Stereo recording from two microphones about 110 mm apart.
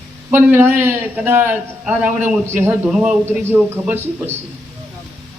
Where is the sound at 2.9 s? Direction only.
10° right (ahead or behind).